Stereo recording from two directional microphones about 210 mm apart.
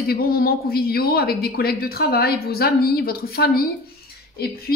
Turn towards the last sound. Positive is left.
turn(degrees=45)  # may be behind; listen again after turning